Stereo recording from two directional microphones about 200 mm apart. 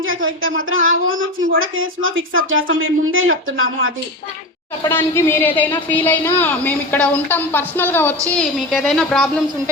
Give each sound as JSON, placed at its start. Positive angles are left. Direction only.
{"t": 0.0, "sound": "a woman's voice", "side_deg": -80}
{"t": 4.8, "sound": "a woman's voice", "side_deg": 10}